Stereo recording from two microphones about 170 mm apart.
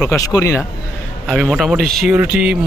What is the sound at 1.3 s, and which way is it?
A man's voice, centre (ahead or behind).